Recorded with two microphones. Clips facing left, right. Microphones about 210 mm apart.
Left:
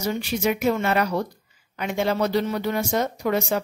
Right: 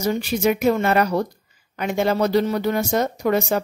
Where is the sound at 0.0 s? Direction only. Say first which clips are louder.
Right 4 dB; 45° right (ahead or behind).